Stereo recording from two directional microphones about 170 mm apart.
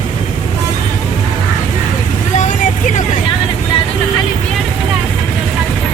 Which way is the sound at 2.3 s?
45° left (ahead or behind).